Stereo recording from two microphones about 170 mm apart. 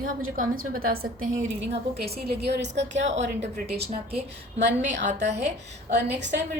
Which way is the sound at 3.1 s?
40° right (ahead or behind).